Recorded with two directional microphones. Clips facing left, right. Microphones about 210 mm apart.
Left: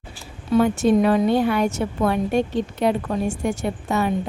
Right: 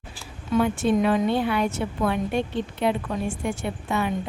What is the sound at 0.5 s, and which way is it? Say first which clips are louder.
A woman's voice: left 4 dB; 40° left (ahead or behind).